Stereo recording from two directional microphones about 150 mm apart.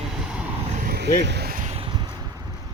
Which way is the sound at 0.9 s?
90° right.